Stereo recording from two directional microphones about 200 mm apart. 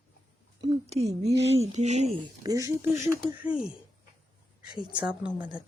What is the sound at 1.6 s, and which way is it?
Speech, 35° right (ahead or behind).